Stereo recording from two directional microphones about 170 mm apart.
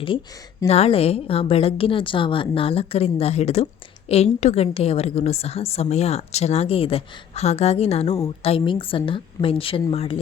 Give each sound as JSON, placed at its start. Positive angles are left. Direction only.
{"t": 0.7, "sound": "a woman's voice", "side_deg": 35}